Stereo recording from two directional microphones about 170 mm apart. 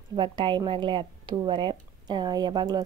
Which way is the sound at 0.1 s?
25° right (ahead or behind).